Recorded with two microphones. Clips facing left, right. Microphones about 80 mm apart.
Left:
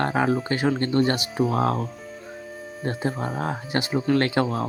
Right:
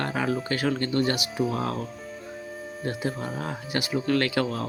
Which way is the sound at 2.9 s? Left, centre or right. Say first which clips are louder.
Left 3 dB; left.